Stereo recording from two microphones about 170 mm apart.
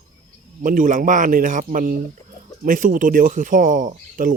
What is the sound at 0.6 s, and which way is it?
Speech, 50° right (ahead or behind).